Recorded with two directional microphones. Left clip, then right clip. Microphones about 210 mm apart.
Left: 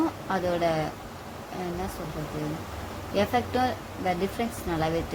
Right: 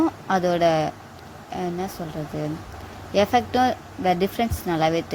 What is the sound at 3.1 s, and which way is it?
Speech, 30° right (ahead or behind).